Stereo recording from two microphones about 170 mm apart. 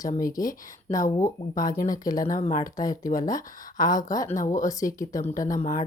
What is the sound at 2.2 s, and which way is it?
Speech, 50° left (ahead or behind).